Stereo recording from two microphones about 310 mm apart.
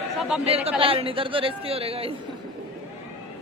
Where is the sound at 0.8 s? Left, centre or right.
Centre.